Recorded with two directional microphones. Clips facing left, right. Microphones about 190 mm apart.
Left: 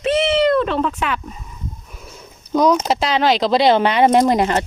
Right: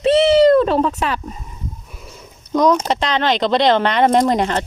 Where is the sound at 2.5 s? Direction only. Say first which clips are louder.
Even; 5° left (ahead or behind).